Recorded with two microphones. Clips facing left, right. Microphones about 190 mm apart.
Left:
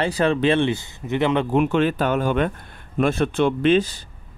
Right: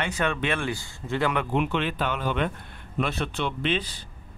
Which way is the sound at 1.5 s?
45° left (ahead or behind).